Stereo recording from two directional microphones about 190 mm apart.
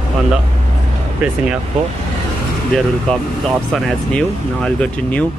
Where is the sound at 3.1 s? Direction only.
5° left (ahead or behind).